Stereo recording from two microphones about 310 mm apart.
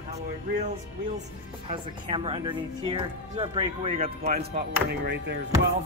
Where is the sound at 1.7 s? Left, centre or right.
Centre.